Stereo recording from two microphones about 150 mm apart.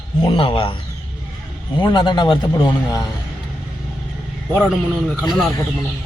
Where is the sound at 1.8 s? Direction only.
30° left (ahead or behind).